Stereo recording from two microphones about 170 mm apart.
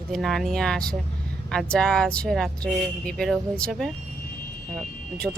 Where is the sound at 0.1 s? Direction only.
Centre (ahead or behind).